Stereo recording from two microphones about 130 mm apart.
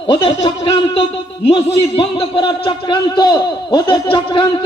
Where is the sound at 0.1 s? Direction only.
40° left (ahead or behind).